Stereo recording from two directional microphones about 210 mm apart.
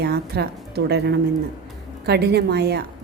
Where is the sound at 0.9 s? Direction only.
50° right (ahead or behind).